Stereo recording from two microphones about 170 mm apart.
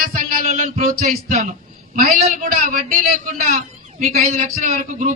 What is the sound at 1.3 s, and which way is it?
Speech, 40° right (ahead or behind).